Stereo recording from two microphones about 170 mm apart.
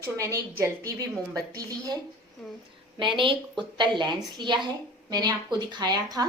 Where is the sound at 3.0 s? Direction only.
30° right (ahead or behind).